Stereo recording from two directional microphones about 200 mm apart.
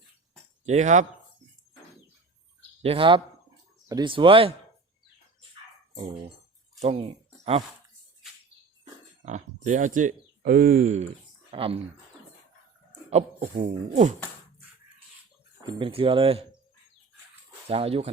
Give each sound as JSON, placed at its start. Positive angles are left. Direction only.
{"t": 0.6, "sound": "speech", "side_deg": -35}
{"t": 2.8, "sound": "speech", "side_deg": -25}
{"t": 6.8, "sound": "speech", "side_deg": -30}
{"t": 8.8, "sound": "speech", "side_deg": -35}
{"t": 11.5, "sound": "speech", "side_deg": -30}
{"t": 13.1, "sound": "speech", "side_deg": -30}
{"t": 15.6, "sound": "speech", "side_deg": -25}
{"t": 17.7, "sound": "speech", "side_deg": -30}